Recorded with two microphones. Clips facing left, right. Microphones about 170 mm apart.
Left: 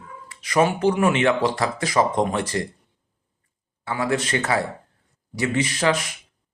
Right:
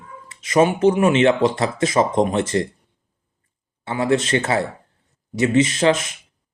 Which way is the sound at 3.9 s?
25° right (ahead or behind).